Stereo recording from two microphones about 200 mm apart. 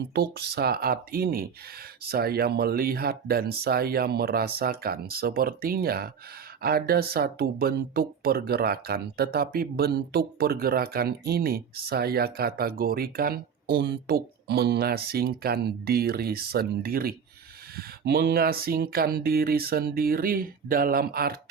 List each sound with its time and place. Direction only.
0.1 s speech: 55° right (ahead or behind)